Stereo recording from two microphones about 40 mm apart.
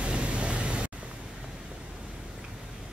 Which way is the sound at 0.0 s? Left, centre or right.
Right.